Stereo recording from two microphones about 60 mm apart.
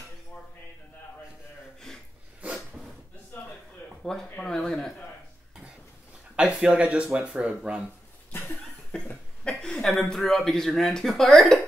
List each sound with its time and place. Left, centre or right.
4.0 s speech: centre
6.3 s speech: centre
8.3 s a sound: left
8.9 s cough: centre
9.4 s a sound: centre
9.8 s speech: centre